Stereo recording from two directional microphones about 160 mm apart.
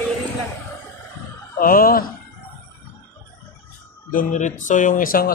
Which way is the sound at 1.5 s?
65° left (ahead or behind).